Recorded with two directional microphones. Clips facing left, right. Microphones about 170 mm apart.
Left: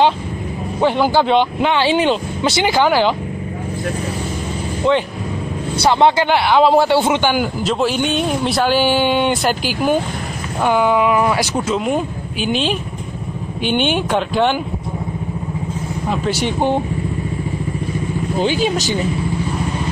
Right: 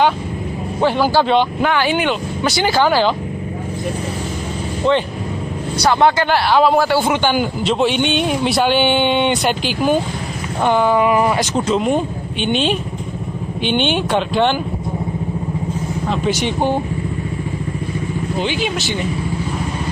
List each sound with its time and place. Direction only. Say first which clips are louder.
0.7 s speech: even; 20° left (ahead or behind)
4.8 s speech: even; 15° left (ahead or behind)
7.6 s speech: right 2 dB; centre (ahead or behind)
11.1 s speech: even; 5° right (ahead or behind)
16.3 s speech: right 1 dB; 20° right (ahead or behind)
18.4 s speech: left 6 dB; 40° left (ahead or behind)